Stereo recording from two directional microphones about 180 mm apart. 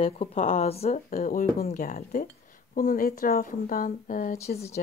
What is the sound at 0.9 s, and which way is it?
Speech, 50° left (ahead or behind).